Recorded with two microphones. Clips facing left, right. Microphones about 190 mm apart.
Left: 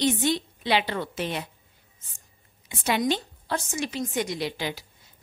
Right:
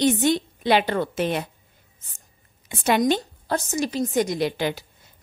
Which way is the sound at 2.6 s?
50° right (ahead or behind).